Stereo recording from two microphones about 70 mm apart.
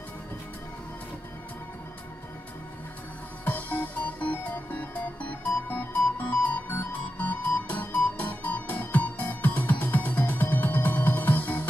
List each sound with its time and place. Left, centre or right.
3.4 s music: left